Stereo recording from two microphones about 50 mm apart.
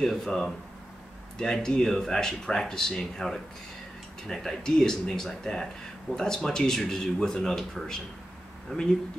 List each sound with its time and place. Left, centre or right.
0.0 s speech: centre
8.7 s speech: left